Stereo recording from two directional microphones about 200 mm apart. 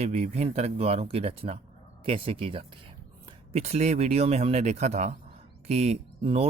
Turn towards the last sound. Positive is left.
turn(degrees=-30)  # may be behind; listen again after turning